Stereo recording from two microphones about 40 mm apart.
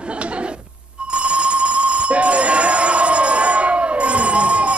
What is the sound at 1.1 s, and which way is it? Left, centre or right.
Alarm, right.